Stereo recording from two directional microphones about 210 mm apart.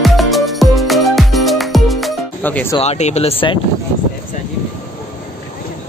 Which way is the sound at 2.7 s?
30° left (ahead or behind).